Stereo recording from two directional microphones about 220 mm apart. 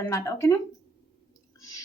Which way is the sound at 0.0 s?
15° left (ahead or behind).